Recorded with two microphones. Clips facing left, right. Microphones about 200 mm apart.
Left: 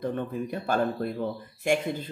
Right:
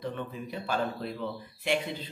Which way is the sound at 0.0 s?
50° left (ahead or behind).